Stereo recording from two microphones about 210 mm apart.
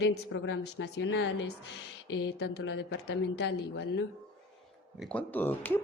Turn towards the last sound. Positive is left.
turn(degrees=10)  # may be behind; listen again after turning